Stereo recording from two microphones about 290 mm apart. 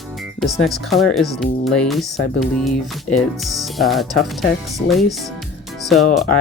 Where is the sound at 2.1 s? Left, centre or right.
Left.